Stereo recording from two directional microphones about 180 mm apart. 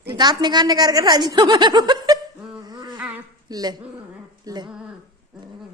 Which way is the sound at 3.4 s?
20° right (ahead or behind).